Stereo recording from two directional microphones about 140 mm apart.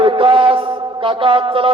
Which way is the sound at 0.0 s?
40° right (ahead or behind).